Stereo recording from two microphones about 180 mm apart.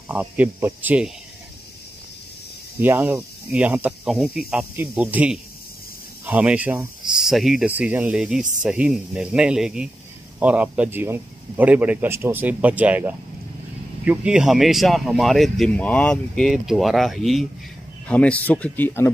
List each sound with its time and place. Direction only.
0.1 s speech: 10° right (ahead or behind)
2.8 s speech: 10° right (ahead or behind)
8.4 s speech: 45° right (ahead or behind)
8.6 s speech: 5° right (ahead or behind); by 19.0 s 10° left (ahead or behind)